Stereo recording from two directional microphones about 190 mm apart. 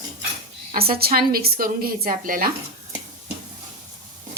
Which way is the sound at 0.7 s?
55° right (ahead or behind).